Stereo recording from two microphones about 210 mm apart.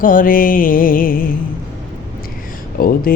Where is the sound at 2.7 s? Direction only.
45° left (ahead or behind).